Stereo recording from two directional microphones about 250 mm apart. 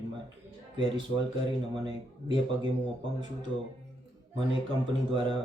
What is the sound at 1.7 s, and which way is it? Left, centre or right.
Speech, centre.